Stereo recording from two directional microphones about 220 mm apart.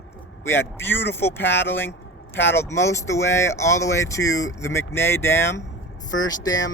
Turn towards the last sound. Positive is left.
turn(degrees=15)  # may be behind; listen again after turning